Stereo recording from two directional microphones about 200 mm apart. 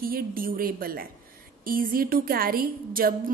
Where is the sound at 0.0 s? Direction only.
45° right (ahead or behind).